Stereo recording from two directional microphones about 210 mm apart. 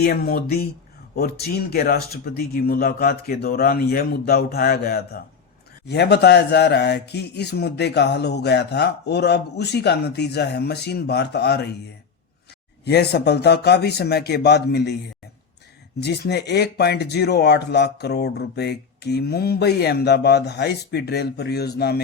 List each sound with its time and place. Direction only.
0.0 s speech: 45° left (ahead or behind)
12.8 s speech: 50° left (ahead or behind)
16.0 s speech: 50° left (ahead or behind)